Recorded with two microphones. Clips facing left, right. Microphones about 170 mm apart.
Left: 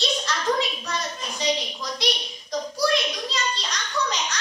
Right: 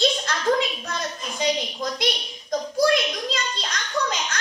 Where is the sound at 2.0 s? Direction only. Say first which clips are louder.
Right 1 dB; 50° right (ahead or behind).